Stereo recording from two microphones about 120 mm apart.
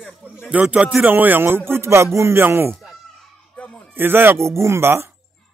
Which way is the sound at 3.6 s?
10° left (ahead or behind).